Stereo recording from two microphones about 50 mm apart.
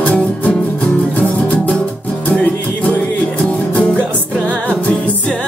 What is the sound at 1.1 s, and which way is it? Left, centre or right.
Music, left.